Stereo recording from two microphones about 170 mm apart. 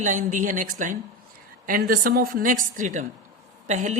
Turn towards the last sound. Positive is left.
turn(degrees=-45)  # may be behind; listen again after turning